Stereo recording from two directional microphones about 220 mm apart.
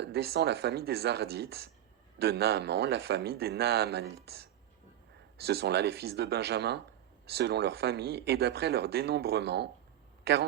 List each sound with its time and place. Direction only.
0.0 s speech: 45° right (ahead or behind)